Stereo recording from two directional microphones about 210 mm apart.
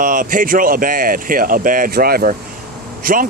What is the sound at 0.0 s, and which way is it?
Speech, 40° right (ahead or behind).